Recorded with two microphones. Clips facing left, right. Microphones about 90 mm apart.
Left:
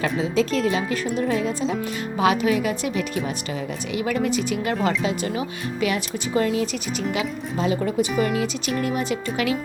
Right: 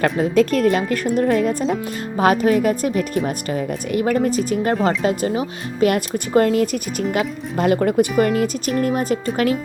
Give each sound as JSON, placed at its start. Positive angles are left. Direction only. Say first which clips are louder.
{"t": 0.0, "sound": "a woman's voice", "louder": "right 6 dB", "side_deg": -55}
{"t": 5.8, "sound": "a woman's voice", "louder": "right 7 dB", "side_deg": -50}
{"t": 8.2, "sound": "a woman's voice", "louder": "right 5 dB", "side_deg": -45}